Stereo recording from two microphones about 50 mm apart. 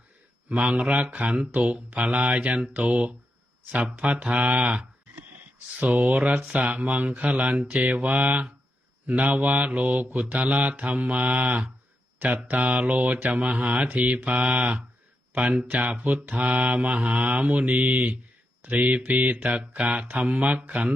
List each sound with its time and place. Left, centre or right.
0.4 s mantra: right